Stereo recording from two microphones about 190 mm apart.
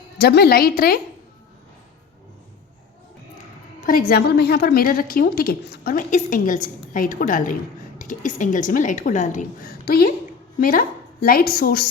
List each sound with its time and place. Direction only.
0.2 s a woman's voice: 55° left (ahead or behind)
3.8 s a woman's voice: 50° left (ahead or behind)